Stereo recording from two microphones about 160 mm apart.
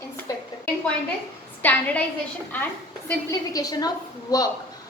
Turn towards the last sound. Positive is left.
turn(degrees=20)  # may be behind; listen again after turning